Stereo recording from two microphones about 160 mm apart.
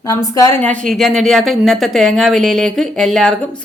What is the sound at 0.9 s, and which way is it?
Speech, centre (ahead or behind).